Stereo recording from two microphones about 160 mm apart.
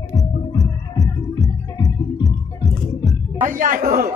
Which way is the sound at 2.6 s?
Centre (ahead or behind).